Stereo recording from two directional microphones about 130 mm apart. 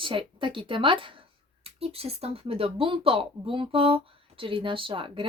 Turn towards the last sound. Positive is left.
turn(degrees=-40)  # may be behind; listen again after turning